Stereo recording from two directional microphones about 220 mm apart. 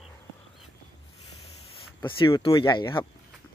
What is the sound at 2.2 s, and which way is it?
Speech, 25° left (ahead or behind).